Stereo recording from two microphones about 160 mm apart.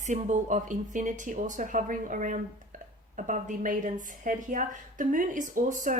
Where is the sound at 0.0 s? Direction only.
50° right (ahead or behind).